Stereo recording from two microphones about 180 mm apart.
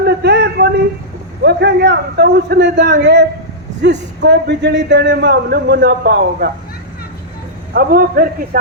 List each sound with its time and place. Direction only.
0.0 s a sound: 65° right (ahead or behind)
1.5 s a man's voice: 65° right (ahead or behind)
2.8 s a man's voice: 50° right (ahead or behind)
3.8 s a man's voice: 65° right (ahead or behind)
7.7 s a man's voice: 55° right (ahead or behind)